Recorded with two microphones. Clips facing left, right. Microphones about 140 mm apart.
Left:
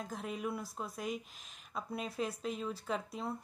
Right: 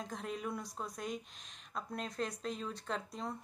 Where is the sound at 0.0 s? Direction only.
5° left (ahead or behind).